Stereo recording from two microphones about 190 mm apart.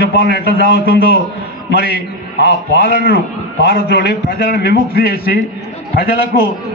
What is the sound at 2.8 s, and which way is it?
A man's voice, 50° left (ahead or behind).